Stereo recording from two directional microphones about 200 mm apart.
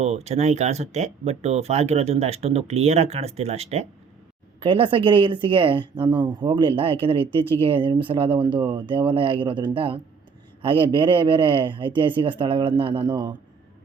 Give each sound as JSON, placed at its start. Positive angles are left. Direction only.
{"t": 0.0, "sound": "speech", "side_deg": -35}